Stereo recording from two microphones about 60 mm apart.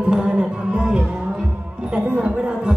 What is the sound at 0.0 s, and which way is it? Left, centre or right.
Music, centre.